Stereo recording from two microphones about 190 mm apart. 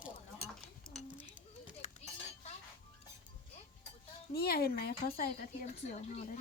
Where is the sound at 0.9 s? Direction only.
Centre (ahead or behind).